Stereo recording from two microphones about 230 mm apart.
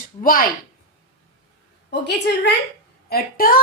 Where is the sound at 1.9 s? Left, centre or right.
Left.